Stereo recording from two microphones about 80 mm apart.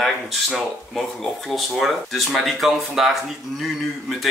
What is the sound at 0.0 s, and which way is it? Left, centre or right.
Speech, centre.